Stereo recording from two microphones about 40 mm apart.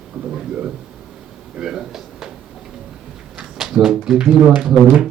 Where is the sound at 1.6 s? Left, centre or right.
Centre.